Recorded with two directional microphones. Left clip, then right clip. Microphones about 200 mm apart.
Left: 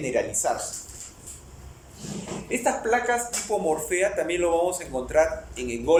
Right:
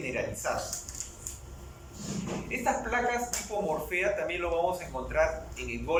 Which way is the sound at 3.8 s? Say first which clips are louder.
Left 5 dB; 40° left (ahead or behind).